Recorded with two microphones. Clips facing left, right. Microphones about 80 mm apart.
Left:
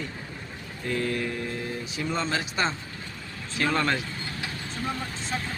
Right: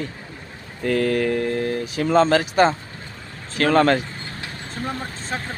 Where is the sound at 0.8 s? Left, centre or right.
Right.